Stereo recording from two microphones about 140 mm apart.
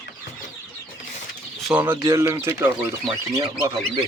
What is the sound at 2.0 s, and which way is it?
Speech, 20° right (ahead or behind).